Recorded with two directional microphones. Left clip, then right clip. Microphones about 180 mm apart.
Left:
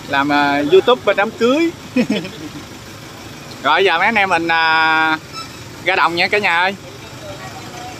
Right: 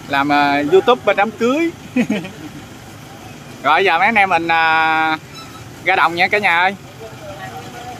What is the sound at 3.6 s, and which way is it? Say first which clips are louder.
Speech: even; 5° right (ahead or behind).